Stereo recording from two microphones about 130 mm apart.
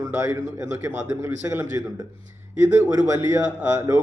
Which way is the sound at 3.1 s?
20° right (ahead or behind).